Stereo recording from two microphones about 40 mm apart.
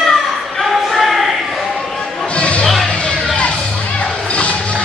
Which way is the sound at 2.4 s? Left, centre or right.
Left.